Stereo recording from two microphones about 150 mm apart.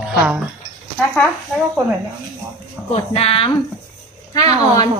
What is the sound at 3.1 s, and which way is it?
Speech, 40° left (ahead or behind).